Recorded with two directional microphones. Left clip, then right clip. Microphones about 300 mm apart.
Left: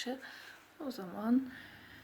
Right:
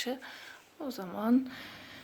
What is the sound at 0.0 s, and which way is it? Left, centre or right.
Speech, centre.